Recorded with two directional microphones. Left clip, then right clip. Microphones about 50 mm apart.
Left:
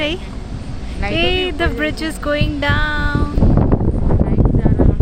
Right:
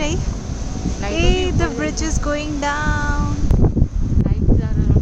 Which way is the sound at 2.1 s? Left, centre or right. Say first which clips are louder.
Left 3 dB; left.